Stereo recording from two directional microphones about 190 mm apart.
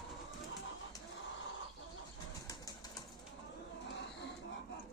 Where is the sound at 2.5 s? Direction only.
20° left (ahead or behind).